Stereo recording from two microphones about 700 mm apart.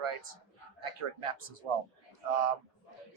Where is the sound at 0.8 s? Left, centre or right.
Right.